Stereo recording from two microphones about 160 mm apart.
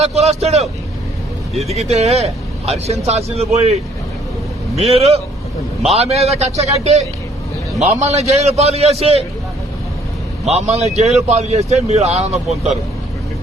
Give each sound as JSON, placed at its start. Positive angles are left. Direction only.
{"t": 0.0, "sound": "speech", "side_deg": -40}
{"t": 4.9, "sound": "speech", "side_deg": -40}
{"t": 10.5, "sound": "a man's voice", "side_deg": -45}
{"t": 12.3, "sound": "speech", "side_deg": 0}